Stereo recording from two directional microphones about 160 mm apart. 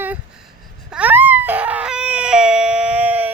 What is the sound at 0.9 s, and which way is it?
Baby cry, 10° right (ahead or behind).